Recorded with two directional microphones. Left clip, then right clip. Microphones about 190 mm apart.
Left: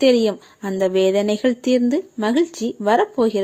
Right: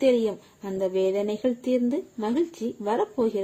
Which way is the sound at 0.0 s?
20° left (ahead or behind).